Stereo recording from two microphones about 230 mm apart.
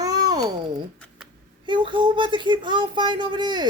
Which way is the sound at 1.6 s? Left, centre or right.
Right.